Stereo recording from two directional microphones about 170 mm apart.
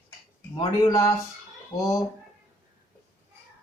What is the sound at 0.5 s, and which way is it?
Speech, 20° left (ahead or behind).